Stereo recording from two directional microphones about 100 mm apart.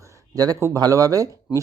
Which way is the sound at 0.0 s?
35° right (ahead or behind).